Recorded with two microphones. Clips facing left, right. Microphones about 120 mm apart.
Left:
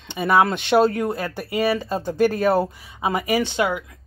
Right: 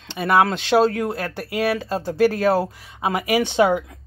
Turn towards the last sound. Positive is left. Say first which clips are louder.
# right 4 dB
turn(degrees=-20)  # may be behind; listen again after turning